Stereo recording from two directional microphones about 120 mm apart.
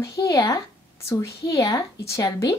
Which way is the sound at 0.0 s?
30° left (ahead or behind).